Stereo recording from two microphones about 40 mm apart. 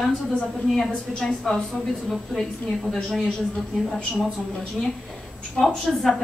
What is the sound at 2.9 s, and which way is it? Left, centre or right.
Speech, centre.